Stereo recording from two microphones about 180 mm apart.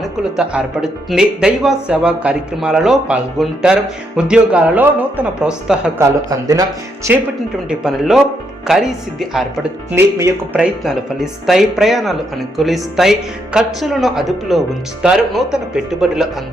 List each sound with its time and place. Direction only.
0.0 s a man's voice: 5° right (ahead or behind)
6.5 s speech: 20° right (ahead or behind)
7.7 s speech: 5° right (ahead or behind)
9.9 s a man's voice: 15° right (ahead or behind)
10.6 s speech: 5° right (ahead or behind)